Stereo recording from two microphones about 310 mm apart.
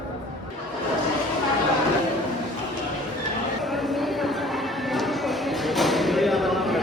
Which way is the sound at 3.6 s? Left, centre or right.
Centre.